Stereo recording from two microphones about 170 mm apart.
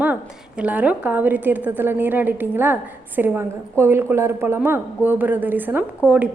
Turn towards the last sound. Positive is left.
turn(degrees=-10)  # may be behind; listen again after turning